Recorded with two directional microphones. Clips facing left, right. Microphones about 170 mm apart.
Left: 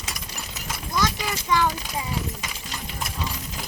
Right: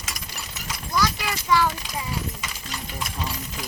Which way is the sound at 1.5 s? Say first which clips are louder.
Right 1 dB; 15° left (ahead or behind).